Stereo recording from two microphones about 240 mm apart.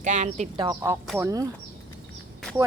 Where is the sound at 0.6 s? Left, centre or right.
Centre.